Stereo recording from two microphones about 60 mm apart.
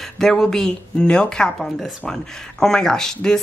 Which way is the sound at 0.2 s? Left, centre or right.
Centre.